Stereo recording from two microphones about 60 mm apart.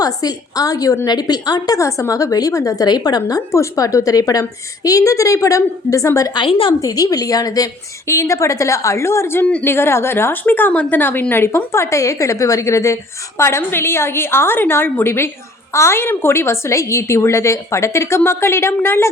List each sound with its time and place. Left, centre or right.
0.0 s a woman's voice: left
3.5 s a woman's voice: left
6.8 s a woman's voice: left
8.0 s a woman's voice: left
11.0 s a woman's voice: left